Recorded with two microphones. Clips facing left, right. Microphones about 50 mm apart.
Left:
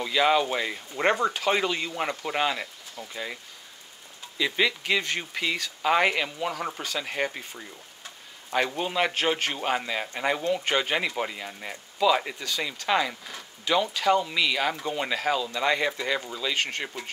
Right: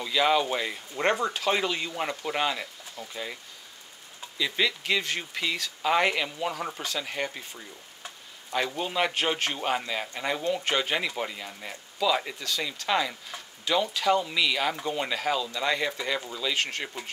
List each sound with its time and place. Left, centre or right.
0.0 s speech: centre
4.4 s speech: centre
8.9 s speech: centre